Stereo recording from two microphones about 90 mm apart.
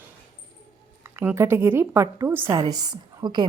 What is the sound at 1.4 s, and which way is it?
A woman's voice, 25° right (ahead or behind).